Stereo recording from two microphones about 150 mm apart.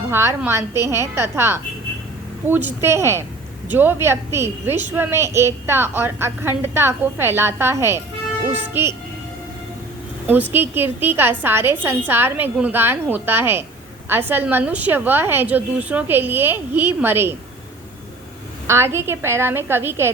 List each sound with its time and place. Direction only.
0.1 s a woman's voice: 15° right (ahead or behind)
10.5 s a woman's voice: 15° right (ahead or behind)
18.7 s a woman's voice: 15° right (ahead or behind)